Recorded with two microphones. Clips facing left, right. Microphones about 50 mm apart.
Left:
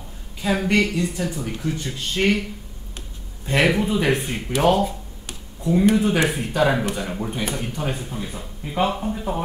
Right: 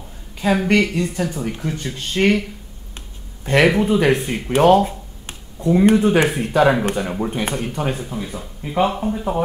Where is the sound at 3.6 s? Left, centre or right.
Centre.